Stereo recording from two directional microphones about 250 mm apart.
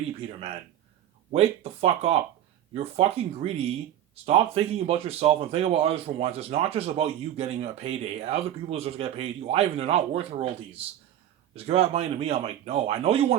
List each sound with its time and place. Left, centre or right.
0.2 s speech: right